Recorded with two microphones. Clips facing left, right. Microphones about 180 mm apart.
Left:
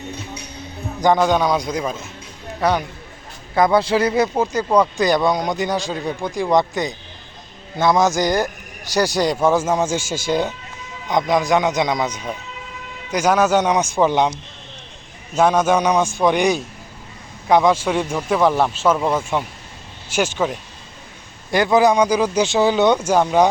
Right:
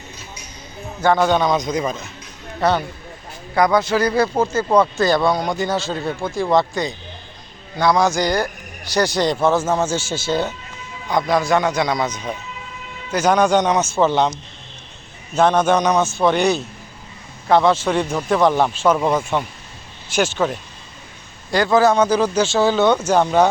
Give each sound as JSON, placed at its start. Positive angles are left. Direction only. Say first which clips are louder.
{"t": 1.0, "sound": "speech", "louder": "even", "side_deg": 15}
{"t": 3.5, "sound": "a man's voice", "louder": "left 1 dB", "side_deg": 25}
{"t": 15.4, "sound": "speech", "louder": "even", "side_deg": 10}